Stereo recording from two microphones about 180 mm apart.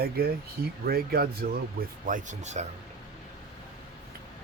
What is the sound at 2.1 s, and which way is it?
Speech, 40° right (ahead or behind).